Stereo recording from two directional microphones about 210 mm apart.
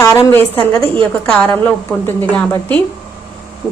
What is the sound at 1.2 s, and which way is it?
A woman's voice, 5° left (ahead or behind).